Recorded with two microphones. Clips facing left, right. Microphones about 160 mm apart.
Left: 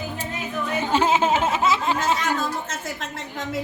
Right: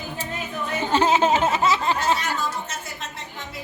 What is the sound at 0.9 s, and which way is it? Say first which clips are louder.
Speech: right 1 dB; 10° left (ahead or behind).